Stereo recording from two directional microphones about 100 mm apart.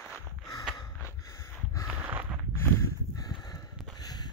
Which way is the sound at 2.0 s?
15° right (ahead or behind).